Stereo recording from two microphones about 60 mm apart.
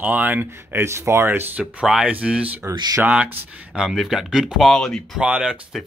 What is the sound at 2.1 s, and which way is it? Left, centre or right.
Speech, right.